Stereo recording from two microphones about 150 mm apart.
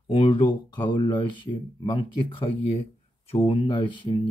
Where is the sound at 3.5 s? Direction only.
35° left (ahead or behind).